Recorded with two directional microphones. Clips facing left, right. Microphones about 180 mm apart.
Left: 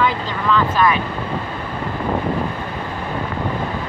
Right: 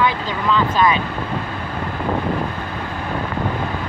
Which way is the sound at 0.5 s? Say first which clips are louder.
Even; 15° right (ahead or behind).